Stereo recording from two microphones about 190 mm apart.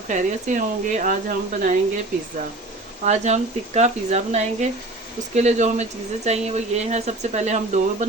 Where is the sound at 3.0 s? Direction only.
35° right (ahead or behind).